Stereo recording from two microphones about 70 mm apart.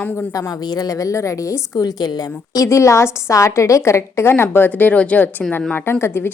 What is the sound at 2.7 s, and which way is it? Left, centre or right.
A woman's voice, left.